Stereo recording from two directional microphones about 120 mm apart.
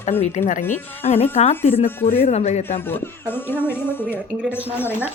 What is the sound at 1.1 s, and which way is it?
Speech, 60° left (ahead or behind).